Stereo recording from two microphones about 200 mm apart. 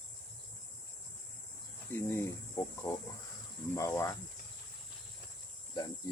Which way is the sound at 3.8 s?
15° left (ahead or behind).